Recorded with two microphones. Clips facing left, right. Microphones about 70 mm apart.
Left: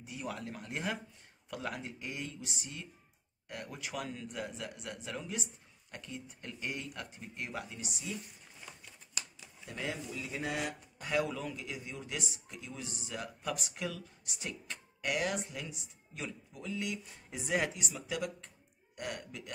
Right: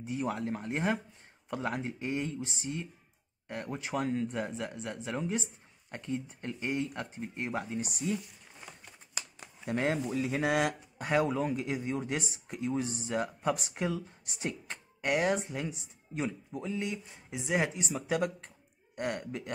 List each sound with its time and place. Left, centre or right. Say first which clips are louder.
0.0 s speech: right 8 dB; right
9.4 s speech: right 12 dB; right
10.2 s speech: right 8 dB; right
11.0 s speech: right 5 dB; right
17.3 s speech: right 4 dB; centre
17.7 s speech: right 7 dB; right